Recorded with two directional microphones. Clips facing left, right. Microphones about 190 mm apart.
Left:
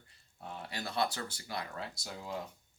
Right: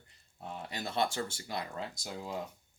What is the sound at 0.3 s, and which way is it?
Speech, 20° right (ahead or behind).